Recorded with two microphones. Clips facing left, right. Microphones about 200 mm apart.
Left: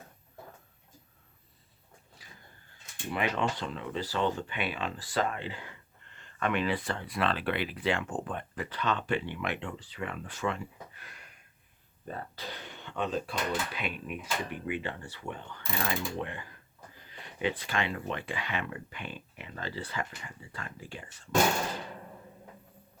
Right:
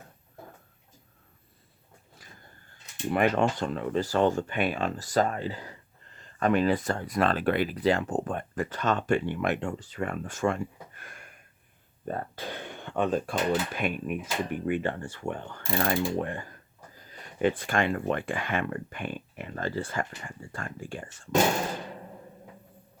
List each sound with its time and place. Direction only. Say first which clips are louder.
2.2 s vehicle: right 3 dB; 50° right (ahead or behind)
3.1 s speech: right 7 dB; 50° right (ahead or behind)